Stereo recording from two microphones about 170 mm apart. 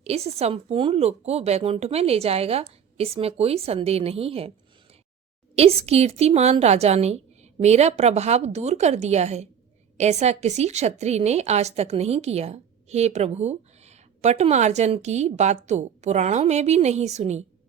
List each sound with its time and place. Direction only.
0.0 s a woman's voice: 35° right (ahead or behind)
5.5 s a woman's voice: 35° right (ahead or behind)